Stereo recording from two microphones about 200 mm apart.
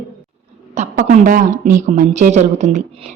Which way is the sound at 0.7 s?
35° right (ahead or behind).